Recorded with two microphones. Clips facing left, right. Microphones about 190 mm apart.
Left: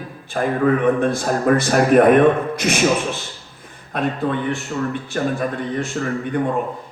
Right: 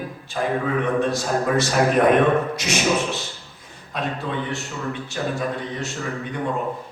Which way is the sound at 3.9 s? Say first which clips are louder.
Left 5 dB; 55° left (ahead or behind).